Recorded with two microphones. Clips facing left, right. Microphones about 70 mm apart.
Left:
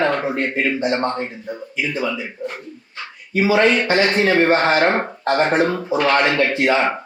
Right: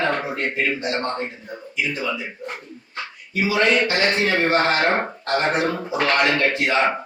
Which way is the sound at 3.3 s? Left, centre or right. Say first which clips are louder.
Left 4 dB; left.